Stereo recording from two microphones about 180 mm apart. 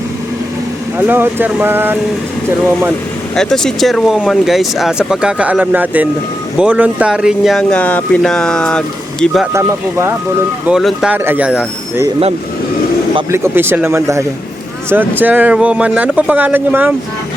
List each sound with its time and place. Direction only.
0.9 s speech: 10° right (ahead or behind)
3.3 s speech: 5° left (ahead or behind)
9.5 s speech: 15° right (ahead or behind)
10.7 s speech: 5° right (ahead or behind)
13.3 s speech: 15° right (ahead or behind)